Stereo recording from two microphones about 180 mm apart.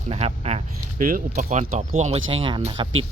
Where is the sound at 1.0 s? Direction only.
45° right (ahead or behind).